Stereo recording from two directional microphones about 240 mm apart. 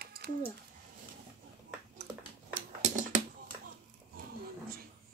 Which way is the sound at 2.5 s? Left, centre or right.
Right.